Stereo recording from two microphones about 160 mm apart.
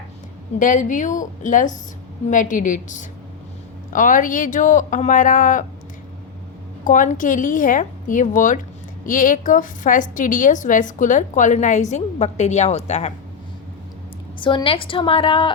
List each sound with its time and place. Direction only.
0.6 s a woman's voice: 55° left (ahead or behind)
6.8 s a woman's voice: 55° left (ahead or behind)
14.3 s a woman's voice: 30° left (ahead or behind)